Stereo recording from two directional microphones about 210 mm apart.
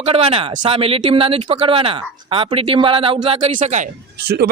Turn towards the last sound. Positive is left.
turn(degrees=-50)  # may be behind; listen again after turning